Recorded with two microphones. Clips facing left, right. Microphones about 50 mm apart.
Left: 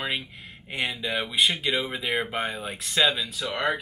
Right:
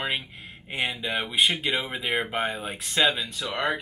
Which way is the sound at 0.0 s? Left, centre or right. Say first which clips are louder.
Right 1 dB; centre.